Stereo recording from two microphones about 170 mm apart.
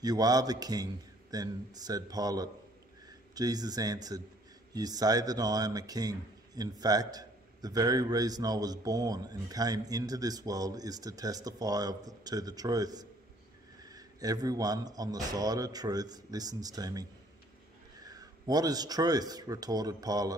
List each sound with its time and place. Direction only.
0.0 s speech: 20° right (ahead or behind)